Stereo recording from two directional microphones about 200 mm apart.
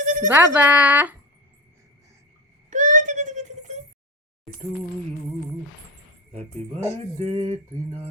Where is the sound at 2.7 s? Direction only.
40° right (ahead or behind).